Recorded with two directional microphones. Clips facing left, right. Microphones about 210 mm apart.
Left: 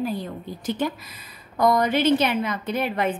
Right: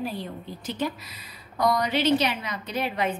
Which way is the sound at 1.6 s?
50° left (ahead or behind).